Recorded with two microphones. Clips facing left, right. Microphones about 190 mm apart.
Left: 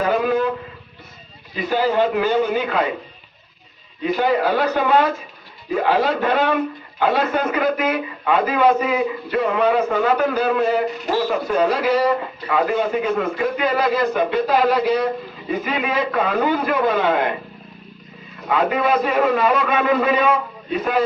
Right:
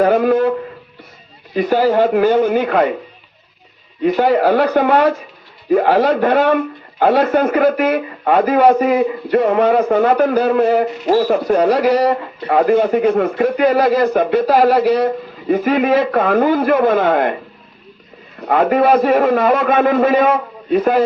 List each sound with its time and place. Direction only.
0.0 s a sound: 55° right (ahead or behind)
1.5 s a man's voice: 50° right (ahead or behind)
4.0 s a man's voice: 55° right (ahead or behind)
18.4 s a man's voice: 50° right (ahead or behind)